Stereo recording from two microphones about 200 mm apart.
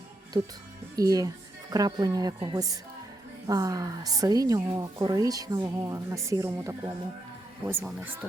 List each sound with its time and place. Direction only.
0.4 s a woman's voice: 20° right (ahead or behind)